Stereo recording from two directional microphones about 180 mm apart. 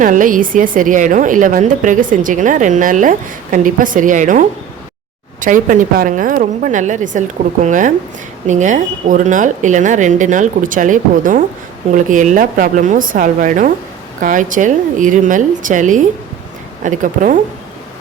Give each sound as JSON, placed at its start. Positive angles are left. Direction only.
{"t": 0.0, "sound": "a woman's voice", "side_deg": -45}